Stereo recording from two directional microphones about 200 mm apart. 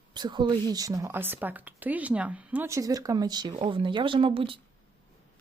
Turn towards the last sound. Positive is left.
turn(degrees=-25)  # may be behind; listen again after turning